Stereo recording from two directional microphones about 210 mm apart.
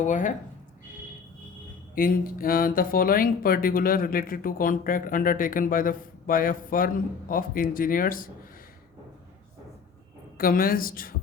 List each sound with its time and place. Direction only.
0.0 s speech: 35° left (ahead or behind)
2.0 s speech: 40° left (ahead or behind)
10.3 s a woman's voice: 45° left (ahead or behind)